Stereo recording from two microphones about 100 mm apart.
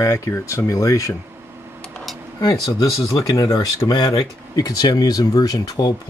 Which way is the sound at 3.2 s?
30° left (ahead or behind).